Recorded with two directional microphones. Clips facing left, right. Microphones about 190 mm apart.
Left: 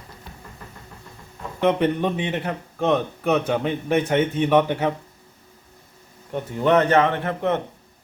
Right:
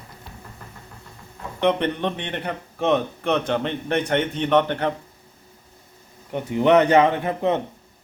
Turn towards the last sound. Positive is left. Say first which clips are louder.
# right 1 dB
turn(degrees=-15)  # may be behind; listen again after turning